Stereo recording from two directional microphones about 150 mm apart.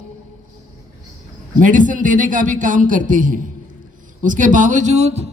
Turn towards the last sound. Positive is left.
turn(degrees=-45)  # may be behind; listen again after turning